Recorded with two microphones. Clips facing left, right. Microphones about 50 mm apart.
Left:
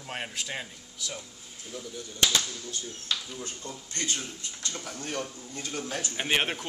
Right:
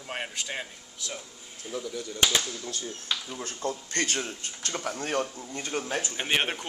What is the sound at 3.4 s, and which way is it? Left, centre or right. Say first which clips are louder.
Speech: right 7 dB; right.